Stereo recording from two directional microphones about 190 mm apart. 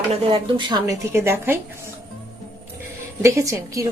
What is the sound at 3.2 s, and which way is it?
Speech, 15° right (ahead or behind).